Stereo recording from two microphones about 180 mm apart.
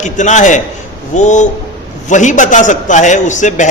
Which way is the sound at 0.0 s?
40° left (ahead or behind).